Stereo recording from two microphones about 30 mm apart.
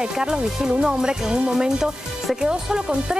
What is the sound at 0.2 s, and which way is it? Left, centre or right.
Speech, right.